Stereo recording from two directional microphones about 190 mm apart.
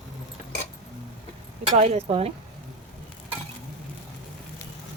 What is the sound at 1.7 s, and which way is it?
Speech, 35° right (ahead or behind).